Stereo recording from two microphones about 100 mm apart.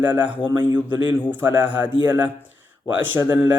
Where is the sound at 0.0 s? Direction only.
15° right (ahead or behind).